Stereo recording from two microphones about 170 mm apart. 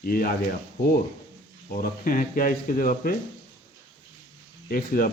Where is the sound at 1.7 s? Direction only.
55° left (ahead or behind).